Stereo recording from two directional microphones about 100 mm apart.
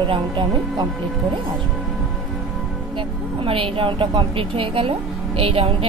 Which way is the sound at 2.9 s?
65° right (ahead or behind).